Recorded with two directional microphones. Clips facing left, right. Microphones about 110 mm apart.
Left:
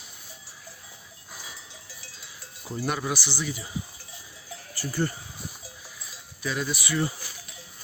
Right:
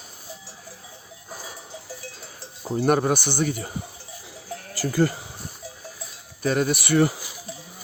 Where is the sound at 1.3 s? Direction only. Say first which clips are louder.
Right 6 dB; 40° right (ahead or behind).